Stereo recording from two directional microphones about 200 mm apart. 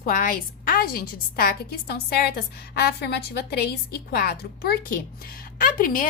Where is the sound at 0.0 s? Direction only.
45° left (ahead or behind).